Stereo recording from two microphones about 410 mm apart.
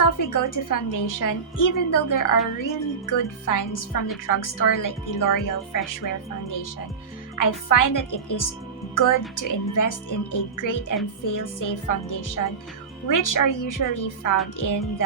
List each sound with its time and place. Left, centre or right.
0.0 s a woman's voice: left
7.3 s a woman's voice: left